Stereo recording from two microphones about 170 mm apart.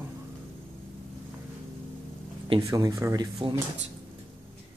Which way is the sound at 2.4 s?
25° right (ahead or behind).